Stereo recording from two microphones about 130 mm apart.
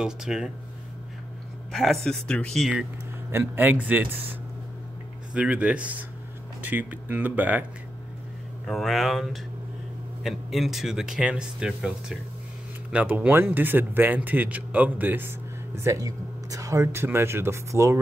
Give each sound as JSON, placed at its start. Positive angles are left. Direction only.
{"t": 0.0, "sound": "speech", "side_deg": -5}
{"t": 1.7, "sound": "speech", "side_deg": 0}
{"t": 3.3, "sound": "speech", "side_deg": -15}
{"t": 8.6, "sound": "speech", "side_deg": 0}